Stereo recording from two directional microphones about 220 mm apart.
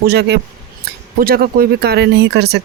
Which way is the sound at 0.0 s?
45° right (ahead or behind).